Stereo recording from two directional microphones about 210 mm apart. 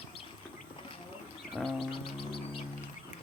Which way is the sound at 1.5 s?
Centre (ahead or behind).